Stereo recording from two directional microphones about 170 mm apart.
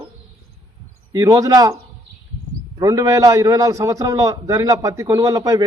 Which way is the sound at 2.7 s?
20° right (ahead or behind).